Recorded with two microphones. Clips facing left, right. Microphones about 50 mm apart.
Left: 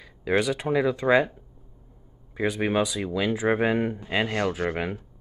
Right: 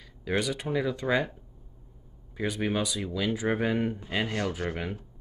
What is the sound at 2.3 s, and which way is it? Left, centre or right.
Speech, left.